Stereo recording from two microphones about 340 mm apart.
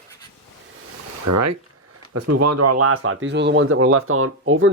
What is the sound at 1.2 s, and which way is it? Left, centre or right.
A man's voice, right.